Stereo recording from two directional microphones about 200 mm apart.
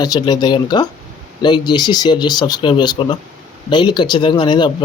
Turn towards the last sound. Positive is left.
turn(degrees=20)  # may be behind; listen again after turning